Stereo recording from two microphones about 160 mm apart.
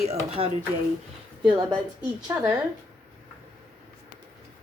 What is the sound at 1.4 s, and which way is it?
Speech, 25° right (ahead or behind).